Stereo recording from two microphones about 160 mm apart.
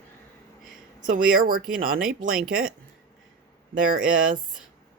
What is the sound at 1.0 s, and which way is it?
Speech, 60° right (ahead or behind).